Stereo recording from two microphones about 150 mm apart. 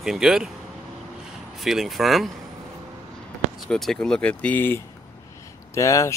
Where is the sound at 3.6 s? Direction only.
Centre (ahead or behind).